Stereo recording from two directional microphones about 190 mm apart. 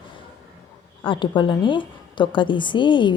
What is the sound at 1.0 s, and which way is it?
A woman's voice, 25° left (ahead or behind).